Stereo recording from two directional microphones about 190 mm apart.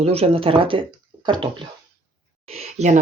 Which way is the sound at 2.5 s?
35° right (ahead or behind).